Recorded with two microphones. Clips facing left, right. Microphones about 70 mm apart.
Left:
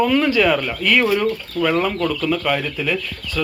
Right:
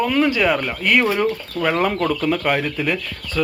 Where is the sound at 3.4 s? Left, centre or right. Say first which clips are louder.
Right 1 dB; centre.